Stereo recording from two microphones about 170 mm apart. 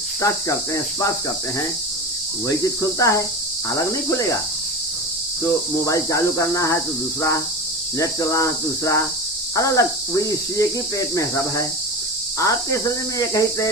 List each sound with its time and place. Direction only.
0.2 s cricket: 20° left (ahead or behind)
3.0 s cricket: 20° left (ahead or behind)
5.5 s cricket: 20° left (ahead or behind)
7.9 s cricket: 20° left (ahead or behind)